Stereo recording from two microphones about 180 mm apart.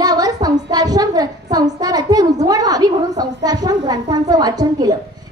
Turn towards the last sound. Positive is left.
turn(degrees=-20)  # may be behind; listen again after turning